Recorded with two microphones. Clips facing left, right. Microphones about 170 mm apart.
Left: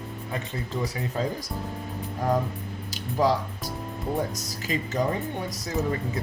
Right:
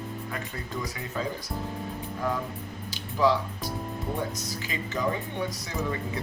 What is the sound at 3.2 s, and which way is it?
Speech, 45° left (ahead or behind).